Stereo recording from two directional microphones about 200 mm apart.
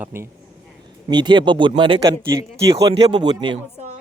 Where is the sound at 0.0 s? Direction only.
10° right (ahead or behind).